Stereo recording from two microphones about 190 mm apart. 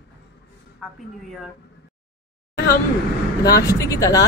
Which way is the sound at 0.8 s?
Centre (ahead or behind).